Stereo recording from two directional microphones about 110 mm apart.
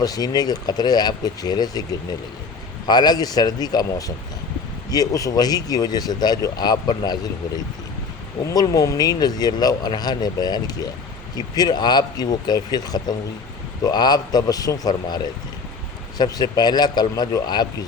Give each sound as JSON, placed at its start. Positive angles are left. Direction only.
{"t": 0.0, "sound": "speech", "side_deg": 35}
{"t": 8.4, "sound": "speech", "side_deg": 35}